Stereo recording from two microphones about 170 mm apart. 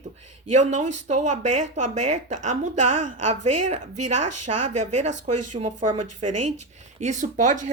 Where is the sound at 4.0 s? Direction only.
45° right (ahead or behind).